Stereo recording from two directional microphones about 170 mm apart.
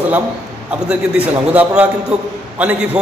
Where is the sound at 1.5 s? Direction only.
10° right (ahead or behind).